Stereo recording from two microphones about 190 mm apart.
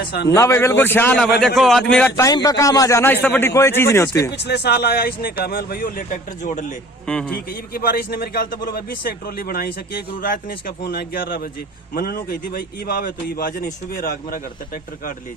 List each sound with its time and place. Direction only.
0.1 s speech: 60° left (ahead or behind)
0.3 s a man's voice: 15° left (ahead or behind)
2.2 s a man's voice: 20° left (ahead or behind)
4.3 s speech: 60° left (ahead or behind); by 6.7 s 45° left (ahead or behind)
7.1 s a man's voice: 5° left (ahead or behind)
7.7 s speech: 50° left (ahead or behind)